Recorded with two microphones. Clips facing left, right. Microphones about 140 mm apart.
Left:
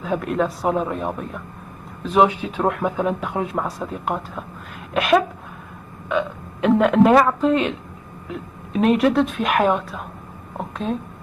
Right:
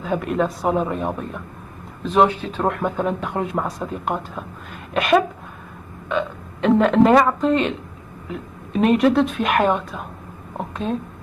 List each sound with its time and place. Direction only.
0.0 s a woman's voice: centre (ahead or behind)